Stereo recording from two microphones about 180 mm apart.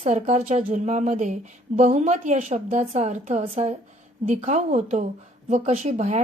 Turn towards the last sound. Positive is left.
turn(degrees=-40)  # may be behind; listen again after turning